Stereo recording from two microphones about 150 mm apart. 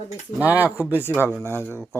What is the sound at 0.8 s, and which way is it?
Speech, 15° left (ahead or behind).